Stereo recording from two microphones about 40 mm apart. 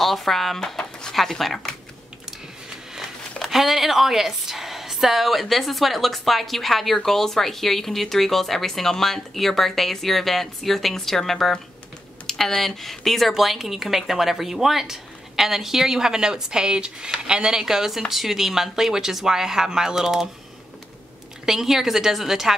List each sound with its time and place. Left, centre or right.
0.0 s speech: centre
0.8 s a sound: centre
1.1 s speech: centre
3.4 s a woman's voice: centre
21.5 s speech: centre